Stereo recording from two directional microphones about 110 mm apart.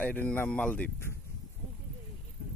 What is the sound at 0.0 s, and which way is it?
Speech, 15° left (ahead or behind).